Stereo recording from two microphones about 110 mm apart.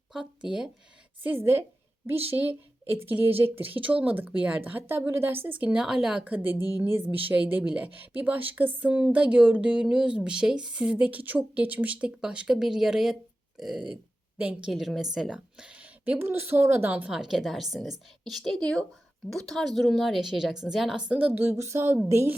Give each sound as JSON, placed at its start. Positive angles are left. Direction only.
{"t": 0.1, "sound": "speech", "side_deg": -5}
{"t": 1.2, "sound": "speech", "side_deg": -20}
{"t": 14.7, "sound": "speech", "side_deg": 0}
{"t": 21.3, "sound": "speech", "side_deg": -25}